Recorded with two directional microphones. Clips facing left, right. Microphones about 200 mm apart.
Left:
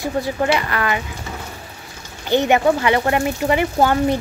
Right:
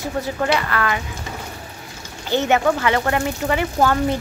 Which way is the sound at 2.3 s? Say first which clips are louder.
Left 2 dB; 15° left (ahead or behind).